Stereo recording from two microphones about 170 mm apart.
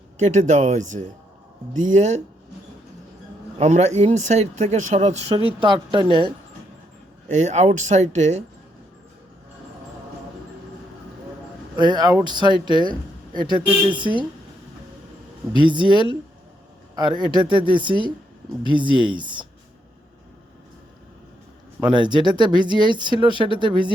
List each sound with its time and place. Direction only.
0.2 s speech: 45° right (ahead or behind)
3.6 s speech: 45° right (ahead or behind)
7.3 s speech: 45° right (ahead or behind)
11.8 s speech: 25° right (ahead or behind)
15.5 s a man's voice: 30° right (ahead or behind)
21.9 s speech: 25° right (ahead or behind)